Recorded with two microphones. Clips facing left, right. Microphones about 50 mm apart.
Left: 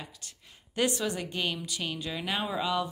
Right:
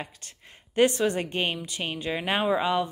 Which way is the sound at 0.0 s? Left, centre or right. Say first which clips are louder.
Right 6 dB; right.